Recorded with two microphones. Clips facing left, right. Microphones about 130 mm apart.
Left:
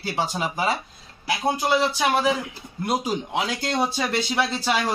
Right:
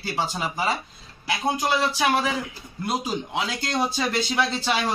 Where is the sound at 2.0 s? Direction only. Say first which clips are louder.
Left 1 dB; 10° left (ahead or behind).